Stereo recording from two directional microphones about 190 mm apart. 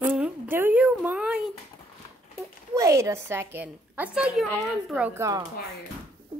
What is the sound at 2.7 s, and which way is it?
A woman's voice, 15° right (ahead or behind).